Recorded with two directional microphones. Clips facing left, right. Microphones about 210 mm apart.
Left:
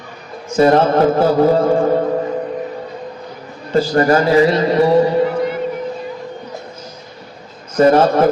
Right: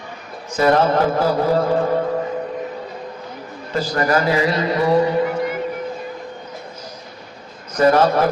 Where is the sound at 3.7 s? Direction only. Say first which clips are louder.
Left 6 dB; 30° left (ahead or behind).